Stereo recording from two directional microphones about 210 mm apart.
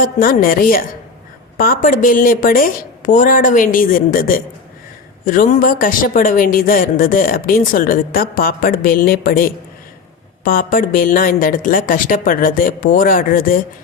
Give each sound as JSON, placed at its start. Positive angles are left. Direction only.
{"t": 0.0, "sound": "a woman's voice", "side_deg": 40}